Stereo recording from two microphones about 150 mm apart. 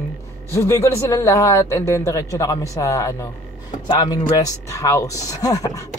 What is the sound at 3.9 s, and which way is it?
Speech, 30° left (ahead or behind).